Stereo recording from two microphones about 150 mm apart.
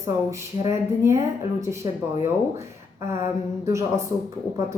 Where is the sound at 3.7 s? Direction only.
20° right (ahead or behind).